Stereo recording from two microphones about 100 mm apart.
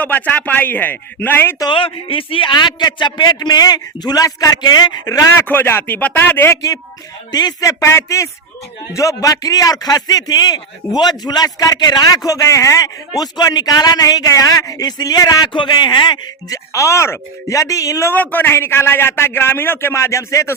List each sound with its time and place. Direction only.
0.0 s a man's voice: 15° left (ahead or behind)
1.7 s a man's voice: 65° left (ahead or behind); by 5.2 s 40° left (ahead or behind)
5.4 s a man's voice: 20° left (ahead or behind)
7.3 s a man's voice: 45° left (ahead or behind)
16.5 s a man's voice: 30° left (ahead or behind)
18.1 s a man's voice: 20° left (ahead or behind)